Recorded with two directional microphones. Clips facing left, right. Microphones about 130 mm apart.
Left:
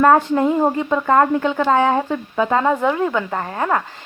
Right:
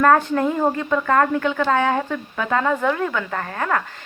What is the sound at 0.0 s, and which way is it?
Speech, 20° left (ahead or behind).